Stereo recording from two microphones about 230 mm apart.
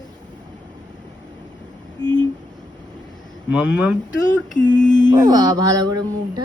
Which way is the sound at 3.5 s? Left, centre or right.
Centre.